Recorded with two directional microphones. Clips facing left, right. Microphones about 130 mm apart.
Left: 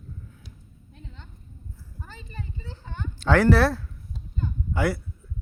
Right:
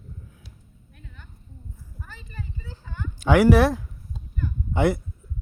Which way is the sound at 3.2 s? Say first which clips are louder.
Right 3 dB; 10° right (ahead or behind).